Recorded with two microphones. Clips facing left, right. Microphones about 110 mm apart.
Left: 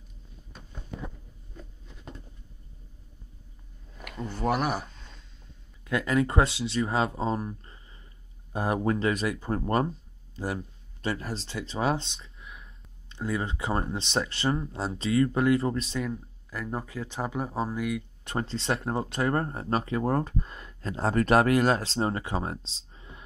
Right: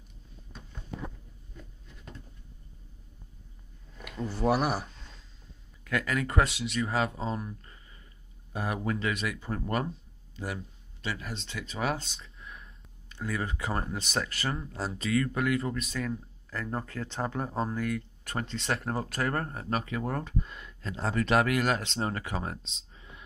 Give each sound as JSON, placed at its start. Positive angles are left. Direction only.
{"t": 4.0, "sound": "speech", "side_deg": 0}
{"t": 5.9, "sound": "speech", "side_deg": 25}
{"t": 12.2, "sound": "a sound", "side_deg": 0}
{"t": 13.1, "sound": "speech", "side_deg": 25}
{"t": 16.0, "sound": "speech", "side_deg": 10}
{"t": 18.2, "sound": "speech", "side_deg": 30}